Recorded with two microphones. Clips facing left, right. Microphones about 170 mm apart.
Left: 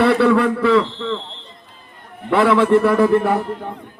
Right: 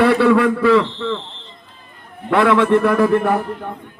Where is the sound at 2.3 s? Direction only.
5° left (ahead or behind).